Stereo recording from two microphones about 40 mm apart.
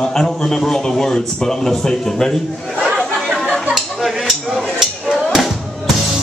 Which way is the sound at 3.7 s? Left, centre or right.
Centre.